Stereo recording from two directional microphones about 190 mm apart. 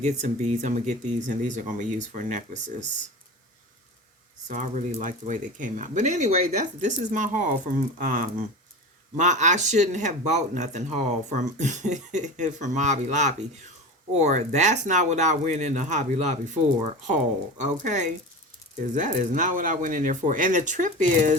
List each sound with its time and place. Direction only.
0.0 s speech: 40° right (ahead or behind)
4.4 s speech: 40° right (ahead or behind)
17.6 s speech: 40° right (ahead or behind)